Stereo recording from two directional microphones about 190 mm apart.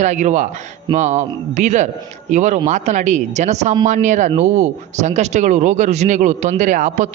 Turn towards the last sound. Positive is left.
turn(degrees=-40)  # may be behind; listen again after turning